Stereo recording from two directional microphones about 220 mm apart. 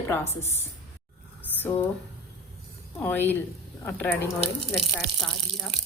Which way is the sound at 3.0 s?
10° left (ahead or behind).